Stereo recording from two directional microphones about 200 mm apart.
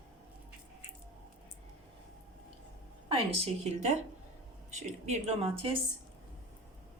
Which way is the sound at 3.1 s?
30° right (ahead or behind).